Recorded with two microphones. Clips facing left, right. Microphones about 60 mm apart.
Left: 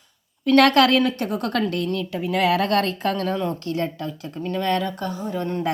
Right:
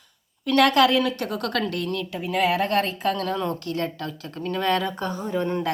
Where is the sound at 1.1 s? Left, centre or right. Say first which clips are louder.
Left 2 dB; left.